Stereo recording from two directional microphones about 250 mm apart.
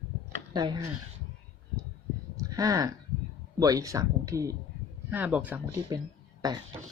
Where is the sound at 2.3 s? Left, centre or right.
Centre.